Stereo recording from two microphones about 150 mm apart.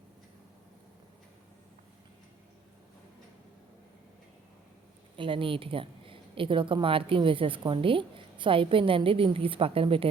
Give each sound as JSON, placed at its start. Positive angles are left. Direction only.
{"t": 5.1, "sound": "a woman's voice", "side_deg": -35}